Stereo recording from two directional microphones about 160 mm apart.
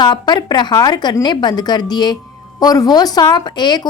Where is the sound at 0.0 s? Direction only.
25° left (ahead or behind).